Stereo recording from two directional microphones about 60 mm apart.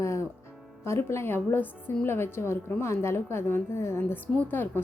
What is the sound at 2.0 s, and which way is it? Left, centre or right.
A woman's voice, left.